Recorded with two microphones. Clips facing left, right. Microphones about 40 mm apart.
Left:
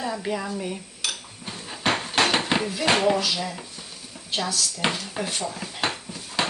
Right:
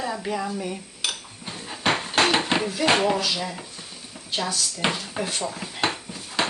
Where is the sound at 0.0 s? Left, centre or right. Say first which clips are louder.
Right 1 dB; centre.